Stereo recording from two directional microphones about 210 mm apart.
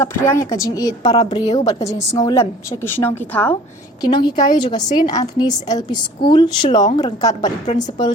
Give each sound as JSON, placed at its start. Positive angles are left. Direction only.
{"t": 0.0, "sound": "a woman's voice", "side_deg": 10}
{"t": 4.0, "sound": "a woman's voice", "side_deg": 20}